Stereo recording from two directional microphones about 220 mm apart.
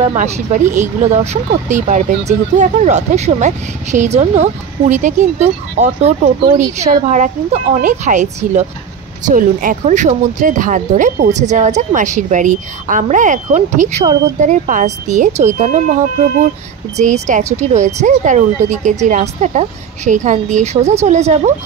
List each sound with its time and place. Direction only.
0.0 s speech: 30° right (ahead or behind)